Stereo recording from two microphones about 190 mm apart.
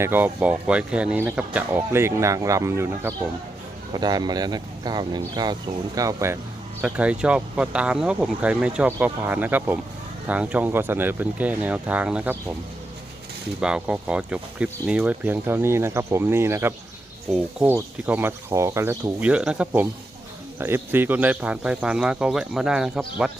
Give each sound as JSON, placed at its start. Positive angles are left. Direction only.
{"t": 0.0, "sound": "speech", "side_deg": -10}
{"t": 13.6, "sound": "speech", "side_deg": -5}